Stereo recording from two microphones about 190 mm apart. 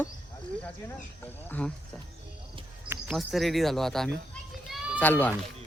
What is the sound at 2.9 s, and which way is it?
Speech, centre (ahead or behind).